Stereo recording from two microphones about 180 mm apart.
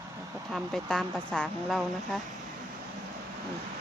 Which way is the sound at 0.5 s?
Centre (ahead or behind).